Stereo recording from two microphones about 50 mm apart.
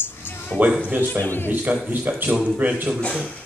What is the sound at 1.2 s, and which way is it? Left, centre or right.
Speech, left.